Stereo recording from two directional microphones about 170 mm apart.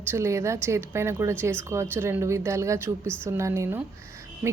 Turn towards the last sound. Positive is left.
turn(degrees=-15)  # may be behind; listen again after turning